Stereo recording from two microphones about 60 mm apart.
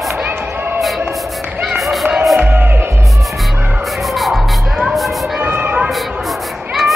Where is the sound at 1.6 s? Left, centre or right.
Centre.